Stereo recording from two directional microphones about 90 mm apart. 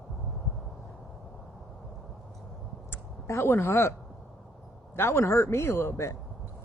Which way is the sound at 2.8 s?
30° left (ahead or behind).